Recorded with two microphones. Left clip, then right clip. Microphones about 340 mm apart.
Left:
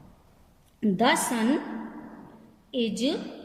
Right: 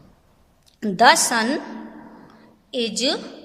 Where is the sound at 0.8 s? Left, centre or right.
Right.